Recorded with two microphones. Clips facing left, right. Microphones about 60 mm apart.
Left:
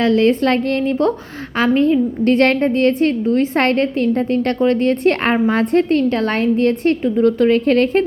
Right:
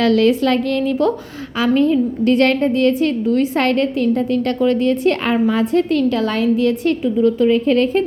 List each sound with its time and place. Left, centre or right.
0.0 s a woman's voice: left
0.3 s a woman's voice: left
2.2 s a woman's voice: left